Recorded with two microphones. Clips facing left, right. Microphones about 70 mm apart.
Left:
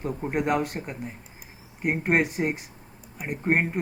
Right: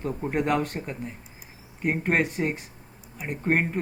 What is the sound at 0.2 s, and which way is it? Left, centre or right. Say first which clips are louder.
A man's voice: even; centre.